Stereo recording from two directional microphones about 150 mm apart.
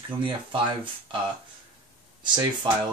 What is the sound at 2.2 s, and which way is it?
Speech, 30° right (ahead or behind).